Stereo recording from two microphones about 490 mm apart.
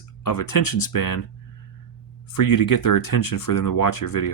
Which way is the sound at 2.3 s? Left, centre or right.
Left.